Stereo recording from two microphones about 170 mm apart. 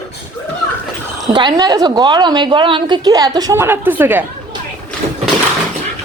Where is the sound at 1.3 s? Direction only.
25° right (ahead or behind); by 4.2 s 10° right (ahead or behind).